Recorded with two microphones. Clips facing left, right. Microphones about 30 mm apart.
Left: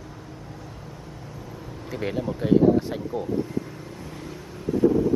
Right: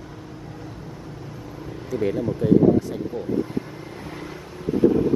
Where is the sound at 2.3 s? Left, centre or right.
Left.